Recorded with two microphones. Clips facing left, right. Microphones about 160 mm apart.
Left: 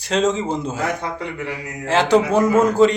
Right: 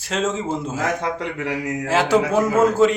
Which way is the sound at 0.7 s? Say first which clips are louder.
Right 1 dB; 90° right.